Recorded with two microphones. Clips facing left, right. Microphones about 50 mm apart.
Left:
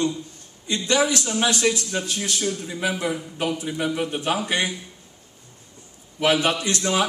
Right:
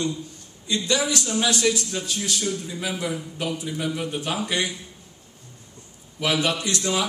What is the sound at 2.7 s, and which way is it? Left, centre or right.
A man's voice, left.